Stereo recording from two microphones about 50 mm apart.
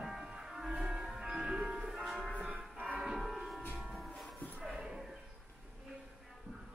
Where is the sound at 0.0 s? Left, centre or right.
Centre.